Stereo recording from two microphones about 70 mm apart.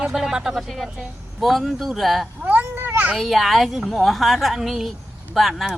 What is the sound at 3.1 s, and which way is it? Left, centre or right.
Speech, centre.